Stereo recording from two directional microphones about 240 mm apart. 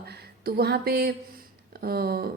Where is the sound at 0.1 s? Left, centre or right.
Right.